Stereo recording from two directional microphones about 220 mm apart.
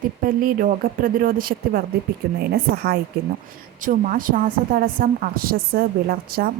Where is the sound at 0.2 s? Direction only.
40° right (ahead or behind).